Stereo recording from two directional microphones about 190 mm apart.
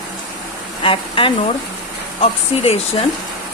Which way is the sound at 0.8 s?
25° left (ahead or behind).